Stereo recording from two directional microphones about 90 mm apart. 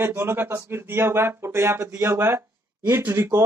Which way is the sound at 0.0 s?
25° right (ahead or behind).